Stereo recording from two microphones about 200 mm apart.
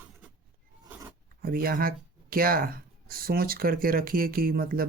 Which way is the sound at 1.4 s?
50° right (ahead or behind).